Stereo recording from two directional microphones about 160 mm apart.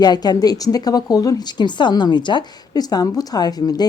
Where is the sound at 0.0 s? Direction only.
25° left (ahead or behind).